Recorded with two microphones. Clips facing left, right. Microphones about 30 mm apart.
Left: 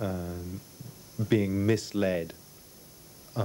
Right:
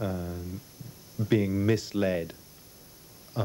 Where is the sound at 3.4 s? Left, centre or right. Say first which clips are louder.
Even; centre.